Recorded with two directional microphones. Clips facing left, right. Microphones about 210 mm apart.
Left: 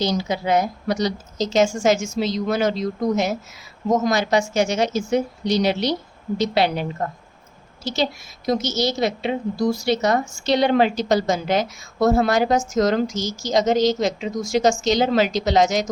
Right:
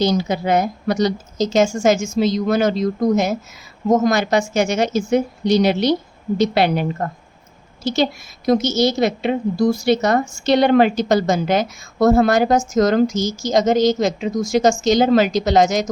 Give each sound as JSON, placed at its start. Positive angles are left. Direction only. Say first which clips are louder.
{"t": 0.0, "sound": "a woman's voice", "louder": "right 4 dB", "side_deg": -55}
{"t": 8.4, "sound": "a woman's voice", "louder": "right 5 dB", "side_deg": -55}